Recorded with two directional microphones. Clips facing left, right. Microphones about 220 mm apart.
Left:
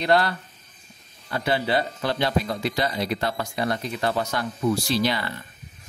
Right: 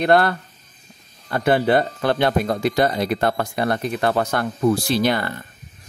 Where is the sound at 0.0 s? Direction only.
55° right (ahead or behind).